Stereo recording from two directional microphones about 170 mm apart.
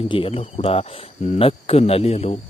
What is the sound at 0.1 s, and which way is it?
A man's voice, 30° left (ahead or behind).